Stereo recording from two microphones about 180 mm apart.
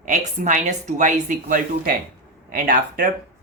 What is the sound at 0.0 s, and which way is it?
Speech, 45° right (ahead or behind).